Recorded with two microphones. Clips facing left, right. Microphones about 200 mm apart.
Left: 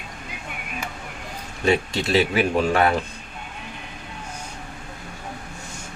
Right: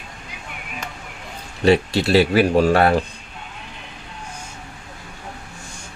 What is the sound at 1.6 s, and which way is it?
Speech, 35° right (ahead or behind).